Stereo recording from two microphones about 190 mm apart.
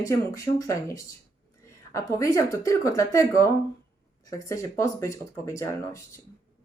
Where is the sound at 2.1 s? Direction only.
15° left (ahead or behind).